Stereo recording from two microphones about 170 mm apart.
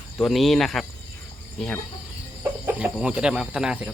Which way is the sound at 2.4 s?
10° right (ahead or behind).